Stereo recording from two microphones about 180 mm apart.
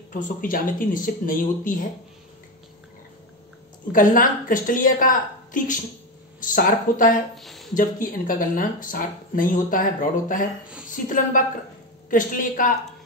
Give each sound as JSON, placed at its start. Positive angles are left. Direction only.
{"t": 0.1, "sound": "speech", "side_deg": 50}
{"t": 3.9, "sound": "speech", "side_deg": 50}
{"t": 7.3, "sound": "a sound", "side_deg": 0}
{"t": 7.7, "sound": "a woman's voice", "side_deg": 50}